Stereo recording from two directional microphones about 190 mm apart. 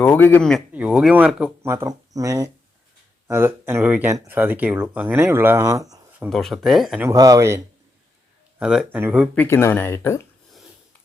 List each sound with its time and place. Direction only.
0.0 s speech: 10° left (ahead or behind)
0.7 s speech: 5° right (ahead or behind)
6.1 s speech: 5° right (ahead or behind)
7.1 s speech: 20° right (ahead or behind)
8.5 s speech: 5° right (ahead or behind)
9.3 s speech: 10° left (ahead or behind)